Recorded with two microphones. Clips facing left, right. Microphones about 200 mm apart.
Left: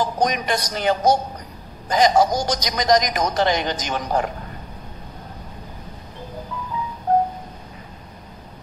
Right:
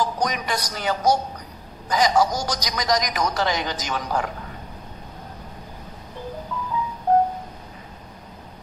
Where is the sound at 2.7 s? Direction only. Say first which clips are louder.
Left 6 dB; 50° left (ahead or behind).